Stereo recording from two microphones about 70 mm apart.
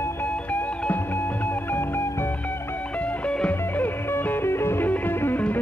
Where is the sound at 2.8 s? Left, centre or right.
Left.